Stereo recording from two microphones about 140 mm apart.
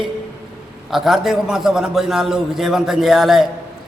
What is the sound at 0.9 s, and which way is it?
A man's voice, centre (ahead or behind).